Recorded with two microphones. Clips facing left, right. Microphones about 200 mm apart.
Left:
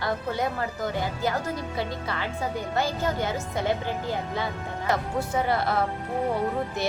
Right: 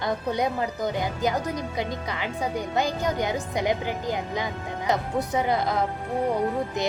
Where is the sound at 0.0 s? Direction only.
15° right (ahead or behind).